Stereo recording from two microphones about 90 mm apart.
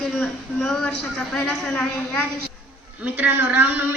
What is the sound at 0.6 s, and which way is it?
Speech, 5° left (ahead or behind).